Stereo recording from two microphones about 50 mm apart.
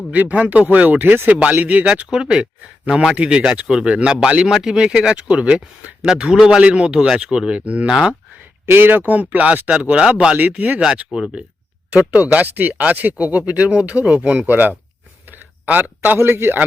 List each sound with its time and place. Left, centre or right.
0.1 s speech: right
1.6 s speech: right
6.6 s speech: right
7.9 s speech: centre
8.6 s speech: right
10.6 s speech: right
11.1 s speech: centre
11.9 s speech: right
14.4 s speech: right
15.3 s a sound: right
16.1 s speech: right